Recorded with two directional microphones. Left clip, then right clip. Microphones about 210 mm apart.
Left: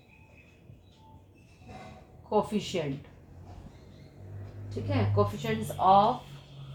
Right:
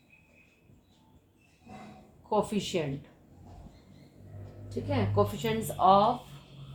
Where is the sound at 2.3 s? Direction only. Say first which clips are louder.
Left 1 dB; 40° right (ahead or behind).